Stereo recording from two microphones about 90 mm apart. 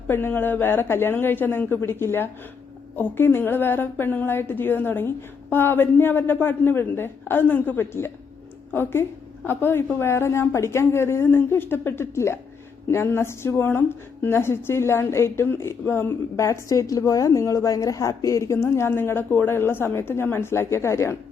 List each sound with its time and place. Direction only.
0.1 s a woman's voice: 25° left (ahead or behind)